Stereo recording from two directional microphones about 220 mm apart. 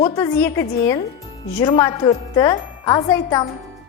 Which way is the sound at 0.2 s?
15° left (ahead or behind).